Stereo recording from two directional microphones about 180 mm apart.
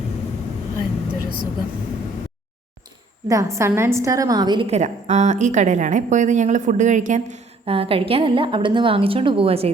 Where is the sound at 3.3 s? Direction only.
15° right (ahead or behind); by 7.2 s 45° right (ahead or behind).